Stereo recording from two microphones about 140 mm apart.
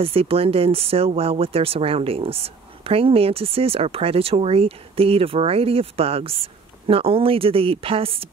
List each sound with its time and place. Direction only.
0.0 s speech: 40° right (ahead or behind)